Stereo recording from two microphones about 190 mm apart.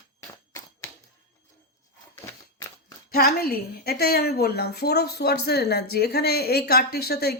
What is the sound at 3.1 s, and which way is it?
A woman's voice, 55° left (ahead or behind).